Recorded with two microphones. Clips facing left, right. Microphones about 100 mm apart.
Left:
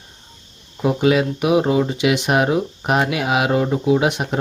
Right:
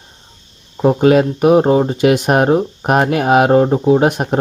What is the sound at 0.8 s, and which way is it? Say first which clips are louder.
Speech: right 6 dB; 45° right (ahead or behind).